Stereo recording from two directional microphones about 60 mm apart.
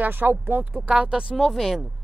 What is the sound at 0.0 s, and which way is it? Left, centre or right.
Speech, right.